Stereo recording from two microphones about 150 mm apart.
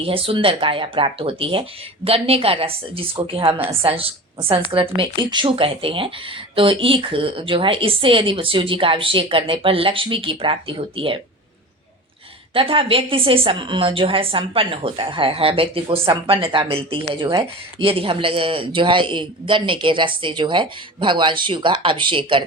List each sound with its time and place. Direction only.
0.0 s speech: 35° right (ahead or behind)
12.5 s speech: 35° right (ahead or behind)